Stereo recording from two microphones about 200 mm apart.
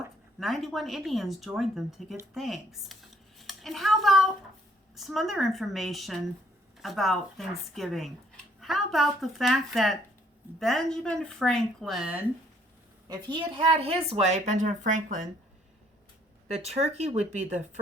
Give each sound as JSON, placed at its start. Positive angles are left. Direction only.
{"t": 0.3, "sound": "speech", "side_deg": 0}
{"t": 13.3, "sound": "a woman's voice", "side_deg": -25}
{"t": 16.6, "sound": "a woman's voice", "side_deg": -35}